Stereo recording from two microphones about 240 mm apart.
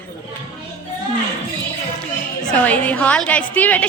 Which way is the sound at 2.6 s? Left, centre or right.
Centre.